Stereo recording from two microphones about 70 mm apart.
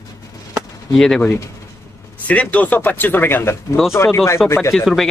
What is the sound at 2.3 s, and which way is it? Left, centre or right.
Speech, centre.